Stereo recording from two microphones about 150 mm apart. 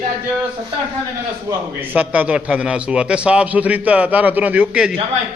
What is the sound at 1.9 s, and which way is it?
A man's voice, 10° right (ahead or behind).